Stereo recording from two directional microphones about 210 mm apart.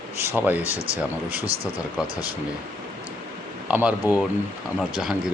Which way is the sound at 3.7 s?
10° right (ahead or behind).